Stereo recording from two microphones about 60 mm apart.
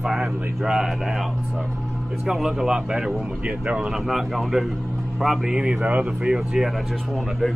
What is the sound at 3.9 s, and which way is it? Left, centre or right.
Speech, centre.